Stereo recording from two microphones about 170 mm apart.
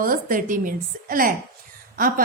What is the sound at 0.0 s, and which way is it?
A woman's voice, 55° right (ahead or behind).